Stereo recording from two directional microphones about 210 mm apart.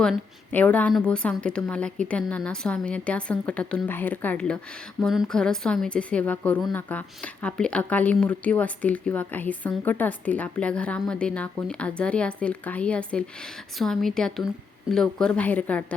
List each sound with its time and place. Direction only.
0.0 s a woman's voice: 5° left (ahead or behind)